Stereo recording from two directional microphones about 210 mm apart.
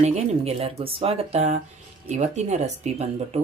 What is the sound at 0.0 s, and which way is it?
Speech, 30° right (ahead or behind).